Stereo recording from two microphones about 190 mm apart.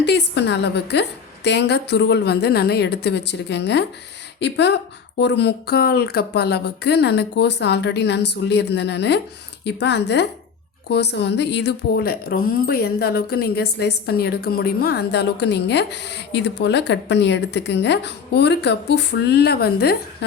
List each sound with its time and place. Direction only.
0.0 s a woman's voice: 65° left (ahead or behind)